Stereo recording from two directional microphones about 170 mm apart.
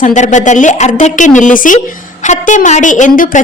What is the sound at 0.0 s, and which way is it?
A woman's voice, 45° left (ahead or behind).